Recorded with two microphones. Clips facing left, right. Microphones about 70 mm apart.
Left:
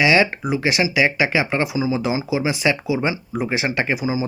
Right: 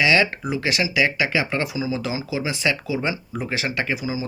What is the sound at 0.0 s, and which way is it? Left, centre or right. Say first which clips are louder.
Speech: left 3 dB; centre.